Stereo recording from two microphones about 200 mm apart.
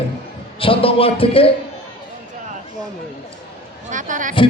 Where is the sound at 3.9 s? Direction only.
40° right (ahead or behind).